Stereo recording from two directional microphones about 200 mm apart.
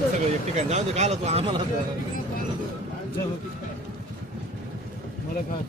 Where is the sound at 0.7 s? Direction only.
35° right (ahead or behind).